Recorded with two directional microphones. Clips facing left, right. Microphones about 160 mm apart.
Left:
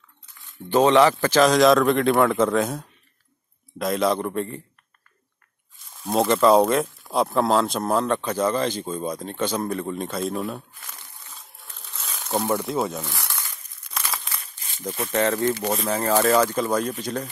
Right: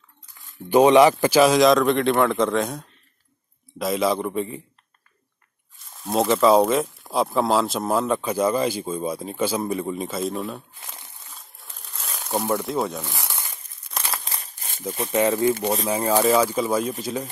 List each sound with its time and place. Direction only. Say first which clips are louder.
0.5 s speech: right 3 dB; 10° right (ahead or behind)
5.9 s speech: even; centre (ahead or behind)
10.8 s a sound: right 2 dB; 25° right (ahead or behind)
11.8 s crumpling: right 1 dB; centre (ahead or behind)
13.0 s crumpling: even; 15° right (ahead or behind)
14.2 s crumpling: right 2 dB; 35° right (ahead or behind)
15.0 s speech: right 2 dB; 10° right (ahead or behind)